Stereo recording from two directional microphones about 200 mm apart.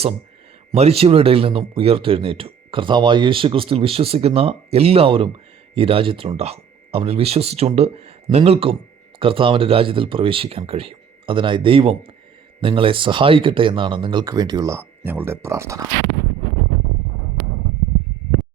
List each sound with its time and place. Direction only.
0.7 s speech: 30° right (ahead or behind); by 15.8 s 15° right (ahead or behind)